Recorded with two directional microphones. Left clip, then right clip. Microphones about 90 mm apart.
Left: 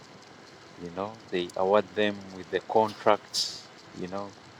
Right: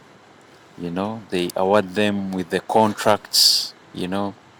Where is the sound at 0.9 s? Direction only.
30° right (ahead or behind).